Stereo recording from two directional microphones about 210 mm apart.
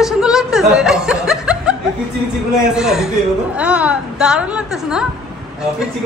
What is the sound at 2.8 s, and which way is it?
Speech, centre (ahead or behind).